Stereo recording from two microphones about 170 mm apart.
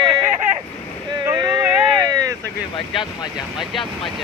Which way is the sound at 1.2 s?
20° right (ahead or behind).